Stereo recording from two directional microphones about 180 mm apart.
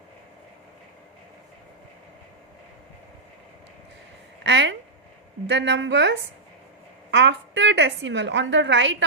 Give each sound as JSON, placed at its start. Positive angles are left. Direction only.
{"t": 4.4, "sound": "a woman's voice", "side_deg": -80}